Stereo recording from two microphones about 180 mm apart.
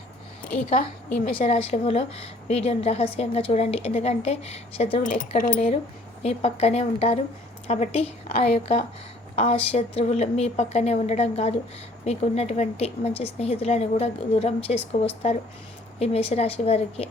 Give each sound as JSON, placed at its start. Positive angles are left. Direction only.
{"t": 1.5, "sound": "a woman's voice", "side_deg": 35}
{"t": 6.2, "sound": "a woman's voice", "side_deg": 35}